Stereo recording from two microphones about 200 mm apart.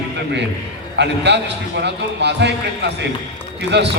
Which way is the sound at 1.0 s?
60° right (ahead or behind).